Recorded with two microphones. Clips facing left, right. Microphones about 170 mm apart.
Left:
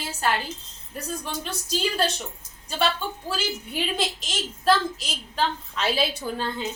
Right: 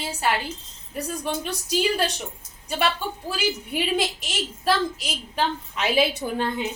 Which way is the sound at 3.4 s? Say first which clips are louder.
Right 5 dB; 10° right (ahead or behind).